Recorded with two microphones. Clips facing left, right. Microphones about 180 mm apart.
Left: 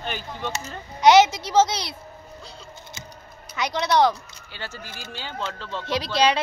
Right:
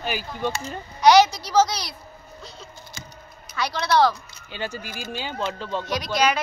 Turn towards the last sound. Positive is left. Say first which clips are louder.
# left 1 dB
turn(degrees=30)  # may be behind; listen again after turning